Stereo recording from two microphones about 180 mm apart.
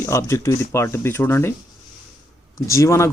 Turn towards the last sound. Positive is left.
turn(degrees=15)  # may be behind; listen again after turning